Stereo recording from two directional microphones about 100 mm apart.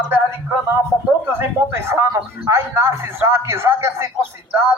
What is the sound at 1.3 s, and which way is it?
Speech, 25° right (ahead or behind).